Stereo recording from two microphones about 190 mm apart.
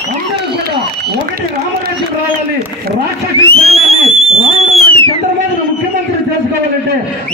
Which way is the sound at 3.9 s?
30° right (ahead or behind).